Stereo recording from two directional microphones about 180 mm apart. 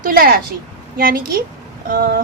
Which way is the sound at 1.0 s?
55° right (ahead or behind).